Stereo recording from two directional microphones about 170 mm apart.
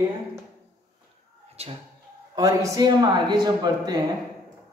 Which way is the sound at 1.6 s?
35° right (ahead or behind).